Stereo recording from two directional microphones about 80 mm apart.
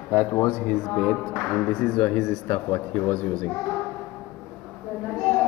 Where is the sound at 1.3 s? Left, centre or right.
Centre.